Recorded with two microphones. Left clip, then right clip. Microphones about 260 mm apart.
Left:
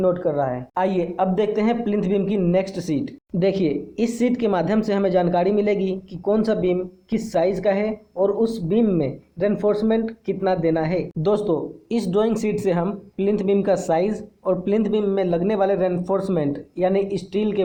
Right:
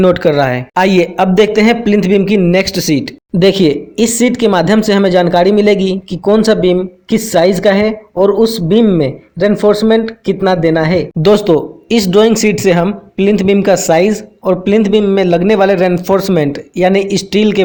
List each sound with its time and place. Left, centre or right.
0.0 s a man's voice: right